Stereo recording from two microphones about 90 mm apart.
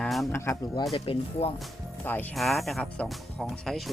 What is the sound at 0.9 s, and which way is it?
Speech, 90° left.